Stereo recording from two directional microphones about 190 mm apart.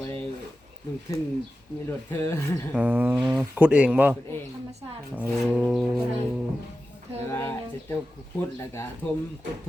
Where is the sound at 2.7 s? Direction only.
10° right (ahead or behind).